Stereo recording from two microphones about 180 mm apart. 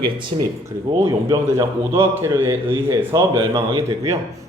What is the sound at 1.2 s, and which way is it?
A man's voice, 15° right (ahead or behind).